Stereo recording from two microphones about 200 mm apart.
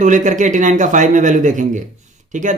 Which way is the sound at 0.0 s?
40° right (ahead or behind).